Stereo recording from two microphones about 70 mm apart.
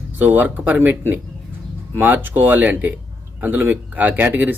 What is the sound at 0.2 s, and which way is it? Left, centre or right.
Speech, right.